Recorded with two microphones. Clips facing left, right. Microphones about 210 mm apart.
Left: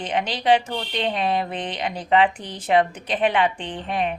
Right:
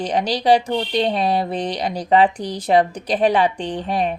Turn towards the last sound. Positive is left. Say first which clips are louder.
# right 4 dB
turn(degrees=-35)  # may be behind; listen again after turning